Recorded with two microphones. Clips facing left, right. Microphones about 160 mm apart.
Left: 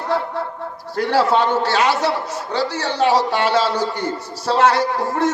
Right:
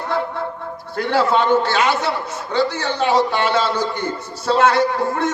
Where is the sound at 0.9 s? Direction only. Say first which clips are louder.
Left 1 dB; 40° left (ahead or behind).